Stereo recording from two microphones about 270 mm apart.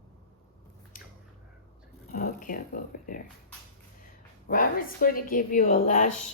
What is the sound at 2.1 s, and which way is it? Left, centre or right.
Speech, left.